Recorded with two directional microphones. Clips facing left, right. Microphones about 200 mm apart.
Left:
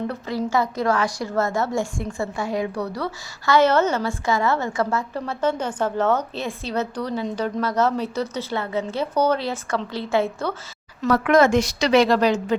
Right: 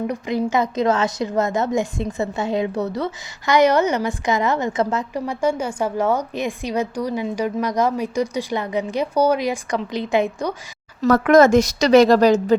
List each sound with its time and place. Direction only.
0.1 s a woman's voice: 15° right (ahead or behind)
11.0 s a woman's voice: 40° right (ahead or behind)